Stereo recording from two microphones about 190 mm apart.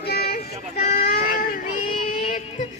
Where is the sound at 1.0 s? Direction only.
50° left (ahead or behind).